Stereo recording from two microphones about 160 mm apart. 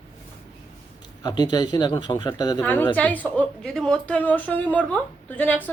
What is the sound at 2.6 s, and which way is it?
A woman's voice, 10° left (ahead or behind).